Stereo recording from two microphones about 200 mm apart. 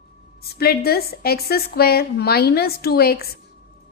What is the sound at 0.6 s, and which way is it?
A woman's voice, 50° left (ahead or behind).